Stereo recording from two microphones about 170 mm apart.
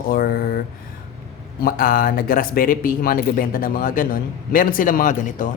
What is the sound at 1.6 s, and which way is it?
Speech, 55° left (ahead or behind).